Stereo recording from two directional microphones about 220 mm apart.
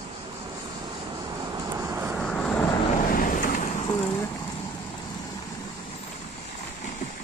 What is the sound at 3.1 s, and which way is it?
Vehicle, 40° left (ahead or behind).